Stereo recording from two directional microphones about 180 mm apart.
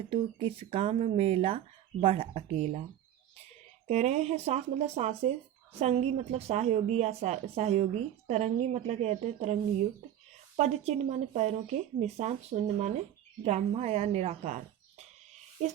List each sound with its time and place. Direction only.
0.1 s a woman's voice: 30° right (ahead or behind)
3.8 s a woman's voice: 40° right (ahead or behind)
10.6 s a woman's voice: 40° right (ahead or behind)